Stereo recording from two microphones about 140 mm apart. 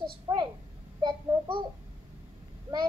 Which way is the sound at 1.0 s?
35° right (ahead or behind).